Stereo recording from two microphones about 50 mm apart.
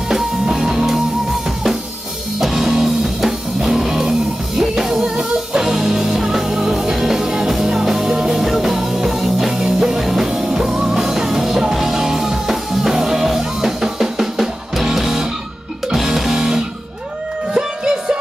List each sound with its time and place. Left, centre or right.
0.1 s music: centre
2.4 s music: centre